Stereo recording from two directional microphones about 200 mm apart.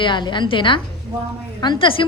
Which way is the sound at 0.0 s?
25° left (ahead or behind).